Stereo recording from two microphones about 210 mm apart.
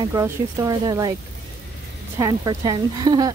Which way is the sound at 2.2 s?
15° right (ahead or behind).